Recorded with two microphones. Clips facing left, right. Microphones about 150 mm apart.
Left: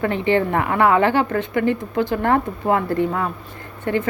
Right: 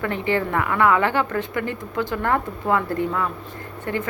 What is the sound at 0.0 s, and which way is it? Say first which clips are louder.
A woman's voice: left 4 dB; 25° left (ahead or behind).